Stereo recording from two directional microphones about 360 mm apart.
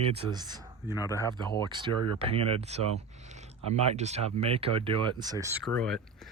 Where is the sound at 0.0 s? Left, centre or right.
Centre.